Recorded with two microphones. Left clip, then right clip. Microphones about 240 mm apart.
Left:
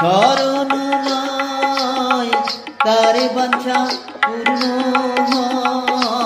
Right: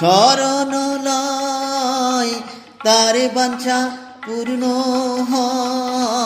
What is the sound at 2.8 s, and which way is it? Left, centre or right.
Music, right.